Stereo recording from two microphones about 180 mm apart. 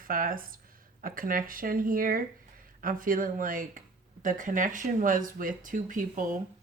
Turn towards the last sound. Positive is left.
turn(degrees=-50)  # may be behind; listen again after turning